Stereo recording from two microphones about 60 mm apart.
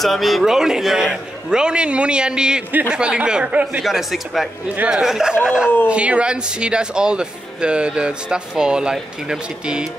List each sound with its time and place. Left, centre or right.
0.0 s speech: centre
3.8 s speech: centre